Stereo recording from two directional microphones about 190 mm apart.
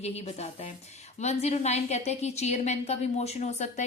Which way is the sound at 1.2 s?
35° left (ahead or behind).